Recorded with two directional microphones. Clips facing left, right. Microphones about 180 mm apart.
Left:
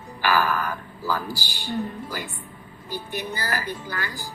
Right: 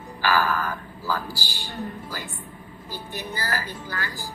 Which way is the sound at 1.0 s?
15° left (ahead or behind).